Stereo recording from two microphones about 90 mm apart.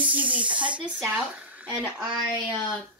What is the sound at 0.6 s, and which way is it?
Speech, 65° right (ahead or behind).